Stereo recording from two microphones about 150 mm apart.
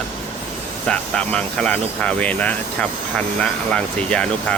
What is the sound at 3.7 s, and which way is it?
Speech, 5° left (ahead or behind).